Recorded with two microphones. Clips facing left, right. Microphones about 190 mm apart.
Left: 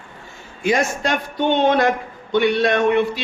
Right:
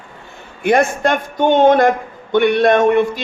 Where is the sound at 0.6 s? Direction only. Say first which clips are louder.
Right 5 dB; 55° right (ahead or behind).